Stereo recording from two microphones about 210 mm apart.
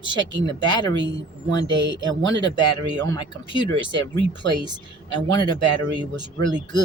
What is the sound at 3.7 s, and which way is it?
Speech, 55° right (ahead or behind).